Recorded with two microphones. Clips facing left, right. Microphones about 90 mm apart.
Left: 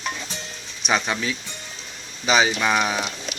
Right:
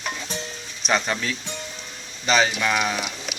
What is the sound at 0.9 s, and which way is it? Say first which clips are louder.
Speech: even; 5° left (ahead or behind).